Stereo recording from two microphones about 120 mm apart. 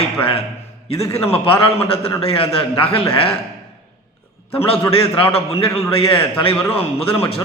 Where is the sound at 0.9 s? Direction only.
25° left (ahead or behind).